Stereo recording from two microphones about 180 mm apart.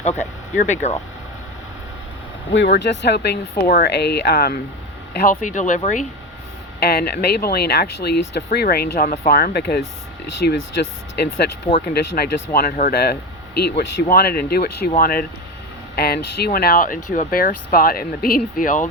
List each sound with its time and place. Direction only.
0.5 s speech: 40° left (ahead or behind)
2.5 s speech: 80° left; by 4.5 s 60° left (ahead or behind)
5.1 s speech: 50° left (ahead or behind)
6.7 s speech: 60° left (ahead or behind)
11.9 s speech: 60° left (ahead or behind)